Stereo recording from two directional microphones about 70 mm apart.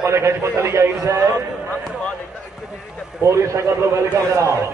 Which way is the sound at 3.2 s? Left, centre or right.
Right.